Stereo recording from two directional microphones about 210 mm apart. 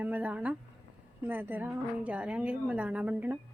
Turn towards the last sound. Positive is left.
turn(degrees=-5)  # may be behind; listen again after turning